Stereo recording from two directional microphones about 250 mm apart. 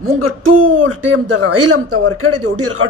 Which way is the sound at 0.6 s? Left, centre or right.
Right.